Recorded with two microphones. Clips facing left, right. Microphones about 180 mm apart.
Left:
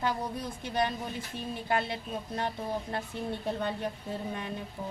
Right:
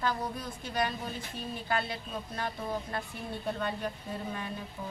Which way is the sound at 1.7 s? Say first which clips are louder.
Left 3 dB; 20° left (ahead or behind).